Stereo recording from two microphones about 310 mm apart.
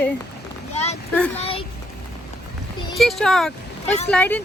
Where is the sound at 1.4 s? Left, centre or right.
Centre.